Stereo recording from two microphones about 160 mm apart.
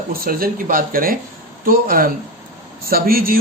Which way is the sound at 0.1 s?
65° right (ahead or behind).